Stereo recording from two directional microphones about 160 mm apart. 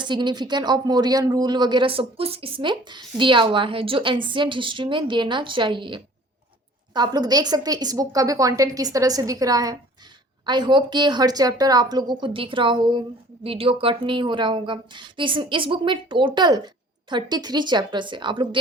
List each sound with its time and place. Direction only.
0.0 s a woman's voice: 30° right (ahead or behind)